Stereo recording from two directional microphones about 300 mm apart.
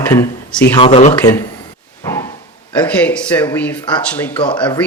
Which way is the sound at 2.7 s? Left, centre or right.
Centre.